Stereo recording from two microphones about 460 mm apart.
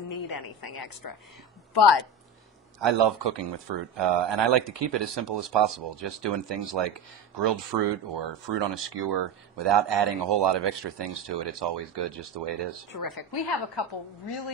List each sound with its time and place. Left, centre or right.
0.1 s a woman's voice: left
1.7 s a woman's voice: left
2.8 s speech: right
12.9 s a woman's voice: left